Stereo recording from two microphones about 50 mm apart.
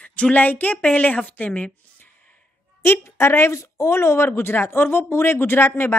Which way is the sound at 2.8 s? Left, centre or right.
Left.